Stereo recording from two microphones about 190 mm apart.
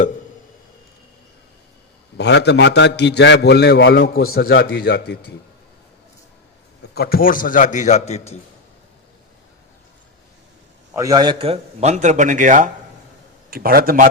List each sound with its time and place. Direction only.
2.1 s a man's voice: 60° left (ahead or behind)
6.9 s a man's voice: 55° left (ahead or behind); by 8.4 s 35° left (ahead or behind)
10.9 s a man's voice: 20° right (ahead or behind); by 14.1 s 50° right (ahead or behind)